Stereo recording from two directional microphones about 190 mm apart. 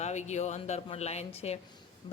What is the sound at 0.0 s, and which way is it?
Speech, 35° left (ahead or behind).